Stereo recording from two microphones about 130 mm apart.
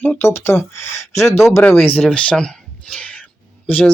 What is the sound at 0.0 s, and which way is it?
Speech, 15° left (ahead or behind).